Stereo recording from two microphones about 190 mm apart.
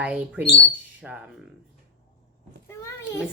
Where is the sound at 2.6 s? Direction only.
15° left (ahead or behind).